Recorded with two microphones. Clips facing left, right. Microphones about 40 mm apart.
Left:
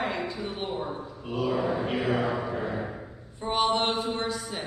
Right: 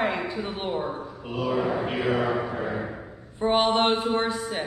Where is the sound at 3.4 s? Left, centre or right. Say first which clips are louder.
Right 4 dB; right.